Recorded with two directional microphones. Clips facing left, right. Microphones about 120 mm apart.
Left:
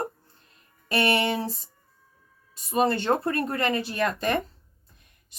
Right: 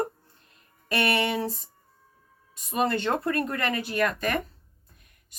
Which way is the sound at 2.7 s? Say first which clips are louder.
Left 3 dB; 30° left (ahead or behind).